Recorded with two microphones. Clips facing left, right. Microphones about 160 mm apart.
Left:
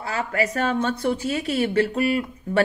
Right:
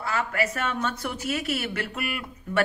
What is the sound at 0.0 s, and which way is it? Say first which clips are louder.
A woman's voice: left 2 dB; 35° left (ahead or behind).